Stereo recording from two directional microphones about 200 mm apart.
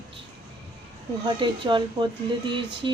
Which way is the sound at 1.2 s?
25° right (ahead or behind).